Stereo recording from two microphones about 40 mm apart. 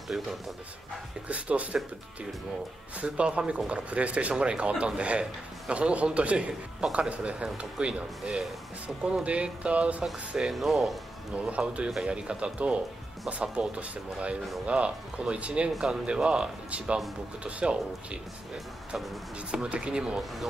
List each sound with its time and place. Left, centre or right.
0.1 s speech: centre
1.3 s speech: right
3.0 s speech: right
10.5 s speech: centre
11.3 s speech: right
19.5 s speech: right